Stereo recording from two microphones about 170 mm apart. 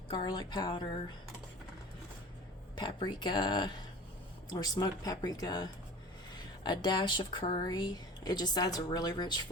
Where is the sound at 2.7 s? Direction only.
25° left (ahead or behind).